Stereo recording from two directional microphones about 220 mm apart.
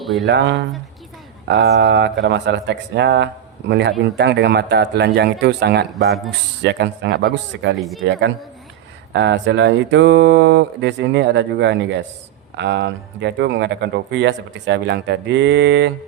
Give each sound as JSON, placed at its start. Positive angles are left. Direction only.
{"t": 0.0, "sound": "speech", "side_deg": 0}
{"t": 0.3, "sound": "speech", "side_deg": -50}
{"t": 6.1, "sound": "a man's voice", "side_deg": 0}
{"t": 6.6, "sound": "speech", "side_deg": -50}
{"t": 7.8, "sound": "a man's voice", "side_deg": 0}
{"t": 9.1, "sound": "speech", "side_deg": -55}